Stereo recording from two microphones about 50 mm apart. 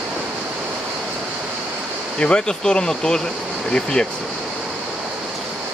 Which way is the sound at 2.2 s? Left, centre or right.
Centre.